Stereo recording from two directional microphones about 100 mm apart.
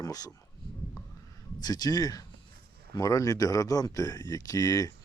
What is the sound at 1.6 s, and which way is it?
Speech, 40° left (ahead or behind).